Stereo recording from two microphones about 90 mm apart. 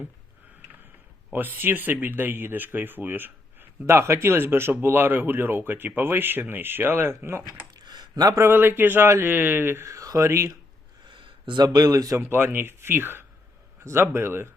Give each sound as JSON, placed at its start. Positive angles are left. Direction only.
{"t": 1.3, "sound": "speech", "side_deg": -20}
{"t": 7.4, "sound": "a sound", "side_deg": -45}
{"t": 8.4, "sound": "speech", "side_deg": -25}
{"t": 9.9, "sound": "speech", "side_deg": -40}
{"t": 11.1, "sound": "speech", "side_deg": -60}
{"t": 12.3, "sound": "speech", "side_deg": -25}